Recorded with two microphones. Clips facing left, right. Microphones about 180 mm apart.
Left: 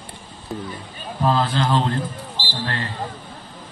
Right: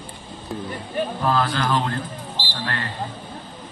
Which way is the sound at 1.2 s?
25° left (ahead or behind).